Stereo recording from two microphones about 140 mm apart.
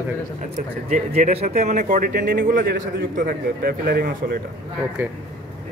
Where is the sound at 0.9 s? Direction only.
55° right (ahead or behind); by 4.1 s 90° right.